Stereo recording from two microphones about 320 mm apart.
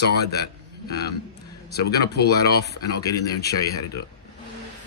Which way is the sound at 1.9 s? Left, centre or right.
Left.